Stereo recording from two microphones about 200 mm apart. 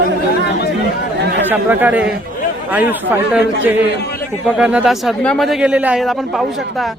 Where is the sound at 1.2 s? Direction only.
60° right (ahead or behind).